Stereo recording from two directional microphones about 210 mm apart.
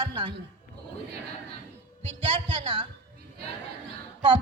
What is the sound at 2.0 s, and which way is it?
Speech, 25° right (ahead or behind).